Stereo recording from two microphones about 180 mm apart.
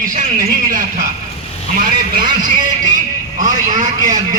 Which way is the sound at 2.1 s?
45° right (ahead or behind).